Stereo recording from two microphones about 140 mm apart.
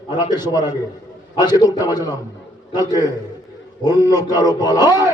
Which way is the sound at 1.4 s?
30° left (ahead or behind).